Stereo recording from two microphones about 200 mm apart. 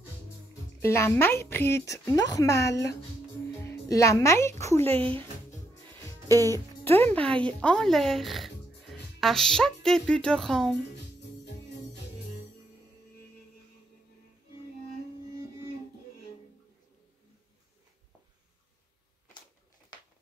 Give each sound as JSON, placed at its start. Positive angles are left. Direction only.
{"t": 0.7, "sound": "a woman's voice", "side_deg": 15}
{"t": 6.2, "sound": "music", "side_deg": -15}
{"t": 6.8, "sound": "speech", "side_deg": 10}
{"t": 11.4, "sound": "music", "side_deg": 55}